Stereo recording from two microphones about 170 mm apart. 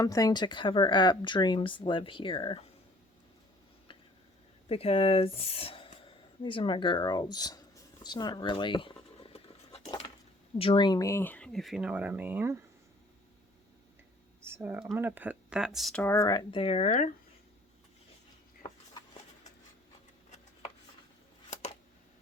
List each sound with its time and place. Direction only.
0.0 s speech: 20° left (ahead or behind)
4.7 s speech: 35° left (ahead or behind)
8.0 s writing: 25° left (ahead or behind)
10.6 s speech: 30° left (ahead or behind); by 12.5 s 10° right (ahead or behind)
14.4 s speech: 10° right (ahead or behind)
16.0 s speech: 20° left (ahead or behind); by 16.9 s 35° left (ahead or behind)
16.9 s speech: 45° left (ahead or behind)
18.6 s a sound: 25° left (ahead or behind)
21.5 s a sound: 40° left (ahead or behind)